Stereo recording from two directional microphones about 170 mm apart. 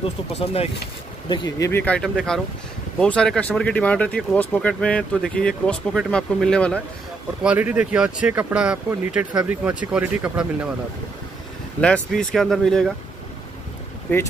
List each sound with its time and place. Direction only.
0.3 s speech: 35° left (ahead or behind)
1.3 s speech: 25° left (ahead or behind)
1.7 s speech: 10° left (ahead or behind)
7.4 s speech: 5° right (ahead or behind)
11.8 s speech: 5° left (ahead or behind)